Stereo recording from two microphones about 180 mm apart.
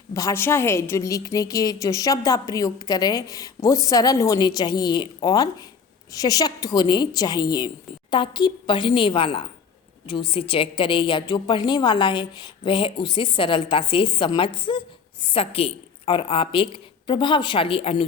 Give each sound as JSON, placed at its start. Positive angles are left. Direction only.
{"t": 0.1, "sound": "a woman's voice", "side_deg": 15}